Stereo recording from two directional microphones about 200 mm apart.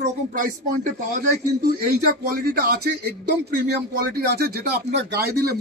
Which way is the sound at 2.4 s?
55° right (ahead or behind).